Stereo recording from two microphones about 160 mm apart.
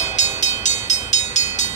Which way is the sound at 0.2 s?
45° left (ahead or behind).